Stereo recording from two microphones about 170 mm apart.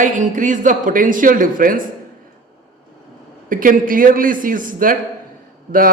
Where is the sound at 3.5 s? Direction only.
55° right (ahead or behind).